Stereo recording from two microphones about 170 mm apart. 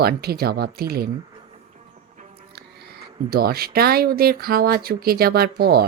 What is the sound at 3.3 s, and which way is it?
Speech, 65° right (ahead or behind).